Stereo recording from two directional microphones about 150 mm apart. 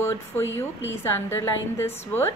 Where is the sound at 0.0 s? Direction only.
15° left (ahead or behind).